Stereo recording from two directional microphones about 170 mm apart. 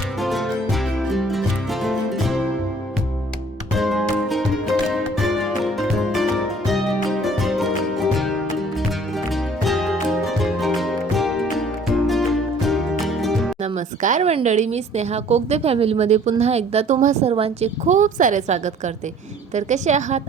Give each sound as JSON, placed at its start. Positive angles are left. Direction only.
{"t": 0.2, "sound": "music", "side_deg": 0}
{"t": 3.8, "sound": "music", "side_deg": 0}
{"t": 13.6, "sound": "a woman's voice", "side_deg": -45}